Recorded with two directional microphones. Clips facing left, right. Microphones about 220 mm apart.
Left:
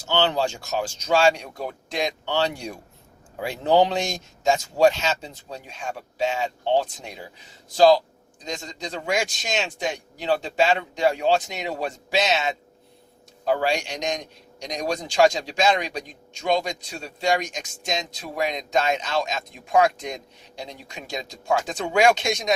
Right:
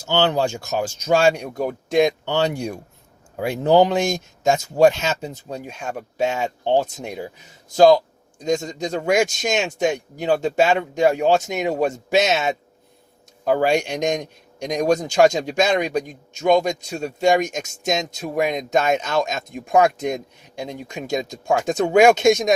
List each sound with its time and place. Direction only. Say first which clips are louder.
0.1 s a man's voice: right 3 dB; 45° right (ahead or behind)